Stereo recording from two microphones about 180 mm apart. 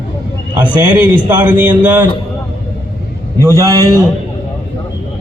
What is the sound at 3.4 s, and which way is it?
Speech, 20° right (ahead or behind).